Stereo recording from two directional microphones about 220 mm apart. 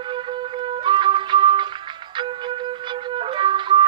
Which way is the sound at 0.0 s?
20° right (ahead or behind).